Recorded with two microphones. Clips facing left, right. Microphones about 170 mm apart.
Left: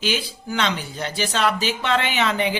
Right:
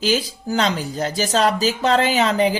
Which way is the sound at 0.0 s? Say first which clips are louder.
Right 5 dB; 40° right (ahead or behind).